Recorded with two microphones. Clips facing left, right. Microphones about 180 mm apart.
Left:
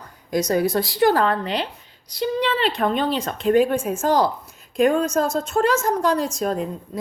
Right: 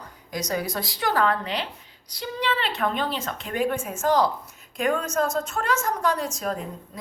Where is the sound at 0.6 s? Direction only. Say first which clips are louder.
Left 10 dB; 30° left (ahead or behind).